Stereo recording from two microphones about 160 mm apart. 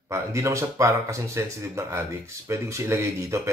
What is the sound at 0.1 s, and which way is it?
Speech, 20° right (ahead or behind).